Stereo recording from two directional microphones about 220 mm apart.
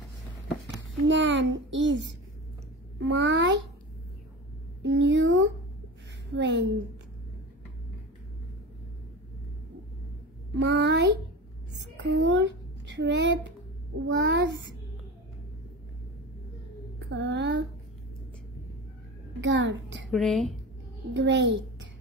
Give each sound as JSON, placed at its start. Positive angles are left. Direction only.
{"t": 1.0, "sound": "a child's voice", "side_deg": -55}
{"t": 4.8, "sound": "a sound", "side_deg": -55}
{"t": 6.3, "sound": "a child's voice", "side_deg": -55}
{"t": 10.6, "sound": "a child's voice", "side_deg": -50}
{"t": 11.7, "sound": "a sound", "side_deg": -55}
{"t": 14.0, "sound": "a child's voice", "side_deg": -55}
{"t": 17.1, "sound": "a woman's voice", "side_deg": -55}
{"t": 19.4, "sound": "a child's voice", "side_deg": -55}
{"t": 20.1, "sound": "speech", "side_deg": 0}
{"t": 21.1, "sound": "a child's voice", "side_deg": -55}